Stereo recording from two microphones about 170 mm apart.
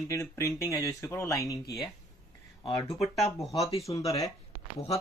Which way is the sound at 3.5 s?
20° left (ahead or behind).